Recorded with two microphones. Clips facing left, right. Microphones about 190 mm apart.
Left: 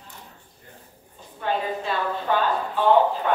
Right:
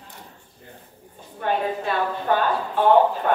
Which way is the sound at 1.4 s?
55° right (ahead or behind).